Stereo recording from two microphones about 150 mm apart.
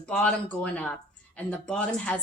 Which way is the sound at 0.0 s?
5° left (ahead or behind).